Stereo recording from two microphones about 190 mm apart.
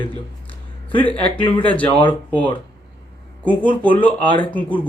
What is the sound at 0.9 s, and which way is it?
Speech, 10° left (ahead or behind).